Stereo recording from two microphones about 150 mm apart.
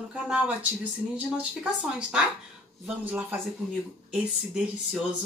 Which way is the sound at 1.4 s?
10° right (ahead or behind).